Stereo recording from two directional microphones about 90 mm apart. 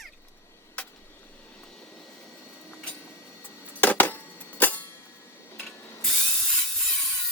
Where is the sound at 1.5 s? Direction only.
10° left (ahead or behind).